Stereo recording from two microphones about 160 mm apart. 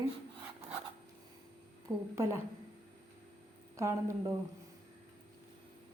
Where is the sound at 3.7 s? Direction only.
20° right (ahead or behind).